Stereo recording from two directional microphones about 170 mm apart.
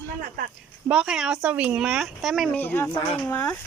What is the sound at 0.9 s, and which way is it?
Speech, 5° right (ahead or behind).